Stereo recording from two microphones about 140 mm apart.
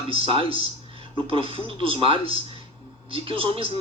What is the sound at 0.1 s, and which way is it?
A man's voice, 40° right (ahead or behind).